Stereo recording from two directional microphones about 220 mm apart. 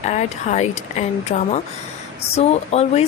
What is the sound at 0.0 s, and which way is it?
Speech, 30° left (ahead or behind).